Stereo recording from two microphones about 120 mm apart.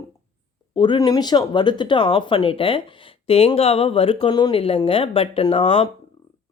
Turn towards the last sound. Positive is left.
turn(degrees=50)  # may be behind; listen again after turning